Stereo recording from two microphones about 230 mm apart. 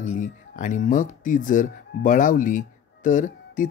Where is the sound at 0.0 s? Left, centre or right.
Left.